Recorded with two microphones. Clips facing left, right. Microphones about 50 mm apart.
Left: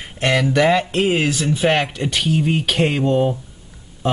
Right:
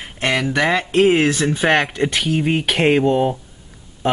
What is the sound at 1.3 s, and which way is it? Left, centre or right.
Speech, right.